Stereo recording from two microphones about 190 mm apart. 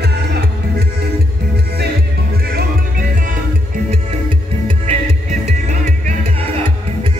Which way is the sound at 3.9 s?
30° right (ahead or behind).